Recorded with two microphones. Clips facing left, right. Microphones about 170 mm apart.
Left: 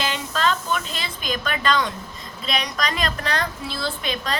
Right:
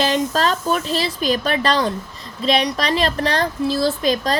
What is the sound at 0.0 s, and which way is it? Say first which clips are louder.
A woman's voice: right 6 dB; 35° right (ahead or behind).